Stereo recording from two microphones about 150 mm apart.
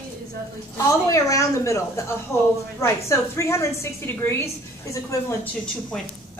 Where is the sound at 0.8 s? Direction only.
20° left (ahead or behind).